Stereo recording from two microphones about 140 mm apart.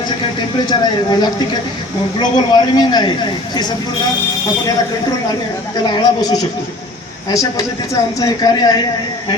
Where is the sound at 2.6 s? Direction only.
30° left (ahead or behind).